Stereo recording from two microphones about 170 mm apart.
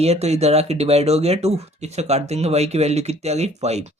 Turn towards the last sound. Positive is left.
turn(degrees=-40)  # may be behind; listen again after turning